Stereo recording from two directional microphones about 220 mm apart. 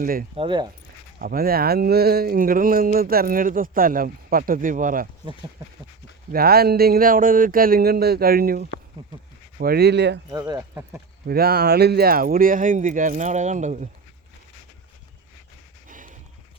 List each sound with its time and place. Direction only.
0.0 s speech: 40° right (ahead or behind)
0.3 s speech: 20° right (ahead or behind)
1.2 s speech: 40° right (ahead or behind)
5.2 s speech: 20° right (ahead or behind)
6.3 s speech: 45° right (ahead or behind)
10.3 s speech: 15° right (ahead or behind)
11.3 s speech: 45° right (ahead or behind)
15.9 s a sound: 35° right (ahead or behind)